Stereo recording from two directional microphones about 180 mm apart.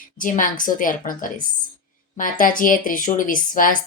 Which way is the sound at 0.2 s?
50° left (ahead or behind).